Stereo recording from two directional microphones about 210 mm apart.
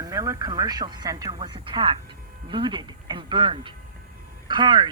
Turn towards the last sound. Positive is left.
turn(degrees=-20)  # may be behind; listen again after turning